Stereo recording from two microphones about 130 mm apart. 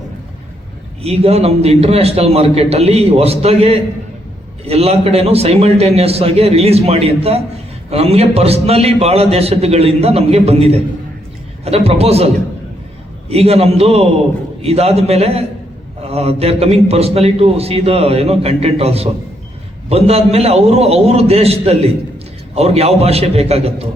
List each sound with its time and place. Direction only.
1.0 s a man's voice: 50° right (ahead or behind)
13.3 s a man's voice: 50° right (ahead or behind)